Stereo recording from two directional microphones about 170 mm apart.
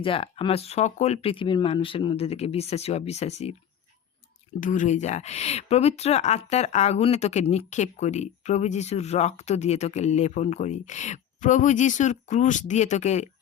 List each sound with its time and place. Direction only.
0.0 s speech: 30° left (ahead or behind)
4.6 s speech: 50° left (ahead or behind)